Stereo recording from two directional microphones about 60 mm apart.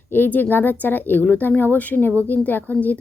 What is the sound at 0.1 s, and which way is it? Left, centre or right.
Speech, left.